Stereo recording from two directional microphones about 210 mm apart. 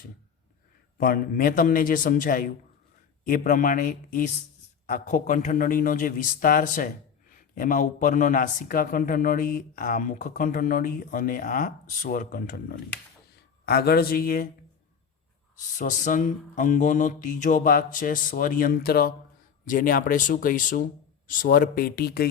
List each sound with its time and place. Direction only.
0.9 s a man's voice: 45° left (ahead or behind)
15.8 s a man's voice: 35° left (ahead or behind)